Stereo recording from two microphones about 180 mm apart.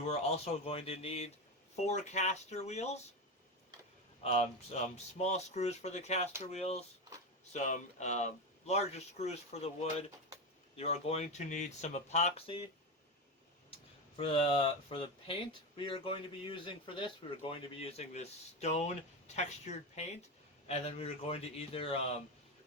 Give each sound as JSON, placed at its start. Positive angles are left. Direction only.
{"t": 0.1, "sound": "speech", "side_deg": 35}
{"t": 4.2, "sound": "speech", "side_deg": 35}
{"t": 14.2, "sound": "speech", "side_deg": 30}